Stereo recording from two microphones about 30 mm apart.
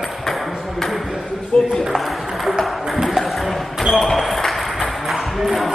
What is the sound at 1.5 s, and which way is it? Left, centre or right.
Speech, left.